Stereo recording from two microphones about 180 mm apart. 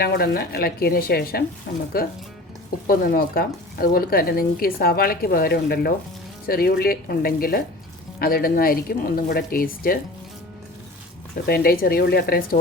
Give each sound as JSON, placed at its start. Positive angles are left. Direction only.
{"t": 0.0, "sound": "speech", "side_deg": 60}
{"t": 11.4, "sound": "speech", "side_deg": 60}